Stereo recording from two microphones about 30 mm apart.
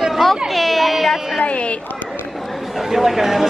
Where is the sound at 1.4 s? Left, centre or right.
Left.